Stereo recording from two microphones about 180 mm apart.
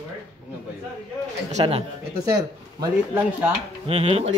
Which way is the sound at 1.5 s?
35° right (ahead or behind).